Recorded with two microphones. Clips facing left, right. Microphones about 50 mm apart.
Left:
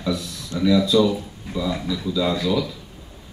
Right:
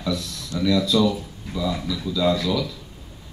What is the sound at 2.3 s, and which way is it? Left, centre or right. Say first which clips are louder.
Speech: left 1 dB; left.